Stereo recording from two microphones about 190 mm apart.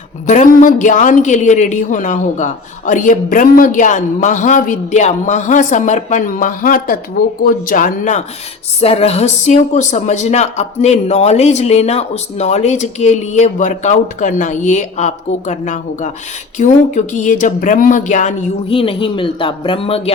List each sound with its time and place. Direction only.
0.3 s a woman's voice: 40° left (ahead or behind)
8.8 s a woman's voice: 30° left (ahead or behind)